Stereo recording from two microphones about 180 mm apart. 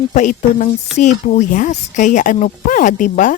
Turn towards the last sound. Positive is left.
turn(degrees=45)  # may be behind; listen again after turning